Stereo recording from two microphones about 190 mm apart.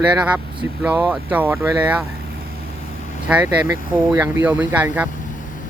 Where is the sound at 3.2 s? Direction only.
10° right (ahead or behind).